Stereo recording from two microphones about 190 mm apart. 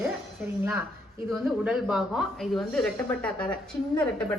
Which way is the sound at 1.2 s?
5° right (ahead or behind).